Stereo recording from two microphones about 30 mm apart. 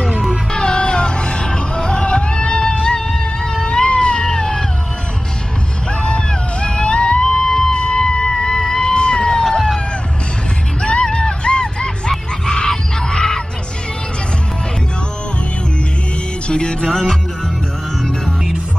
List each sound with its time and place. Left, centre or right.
0.6 s music: left
3.4 s cat: left
5.9 s music: left
7.2 s music: left
7.7 s music: left
10.8 s music: left
12.1 s goose: left
16.4 s music: left
16.9 s music: centre